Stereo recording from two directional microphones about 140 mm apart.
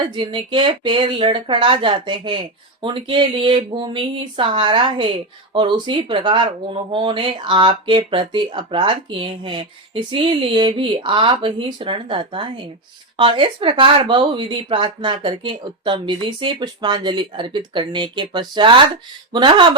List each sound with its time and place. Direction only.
0.1 s speech: 35° right (ahead or behind)